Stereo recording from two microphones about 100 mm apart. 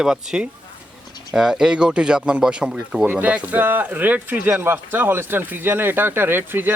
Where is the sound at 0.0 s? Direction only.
5° right (ahead or behind).